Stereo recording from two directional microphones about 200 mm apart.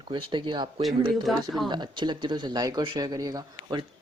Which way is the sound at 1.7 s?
20° right (ahead or behind).